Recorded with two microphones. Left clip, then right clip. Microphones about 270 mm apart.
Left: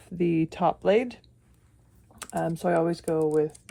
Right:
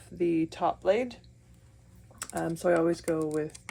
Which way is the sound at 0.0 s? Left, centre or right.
Left.